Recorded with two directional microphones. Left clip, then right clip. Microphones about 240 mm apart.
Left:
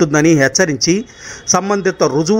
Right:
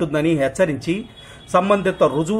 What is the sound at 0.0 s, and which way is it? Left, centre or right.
A man's voice, left.